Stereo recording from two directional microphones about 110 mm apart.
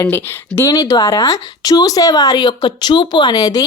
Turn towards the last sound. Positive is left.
turn(degrees=35)  # may be behind; listen again after turning